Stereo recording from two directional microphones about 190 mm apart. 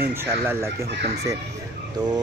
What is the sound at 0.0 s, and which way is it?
Speech, 10° right (ahead or behind).